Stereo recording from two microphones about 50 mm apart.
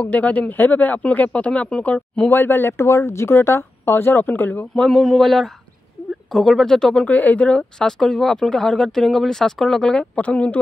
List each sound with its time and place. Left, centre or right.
0.0 s speech: left
2.3 s speech: left
4.7 s a man's voice: centre
7.1 s speech: left
8.0 s speech: centre; by 10.6 s left